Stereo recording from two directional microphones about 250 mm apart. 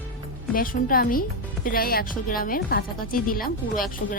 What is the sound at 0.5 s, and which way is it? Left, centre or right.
A woman's voice, left.